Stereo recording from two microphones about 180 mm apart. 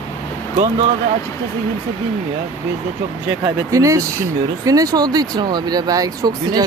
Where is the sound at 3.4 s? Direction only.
20° right (ahead or behind).